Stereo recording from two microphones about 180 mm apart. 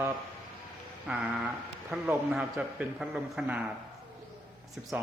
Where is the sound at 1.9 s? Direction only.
5° right (ahead or behind).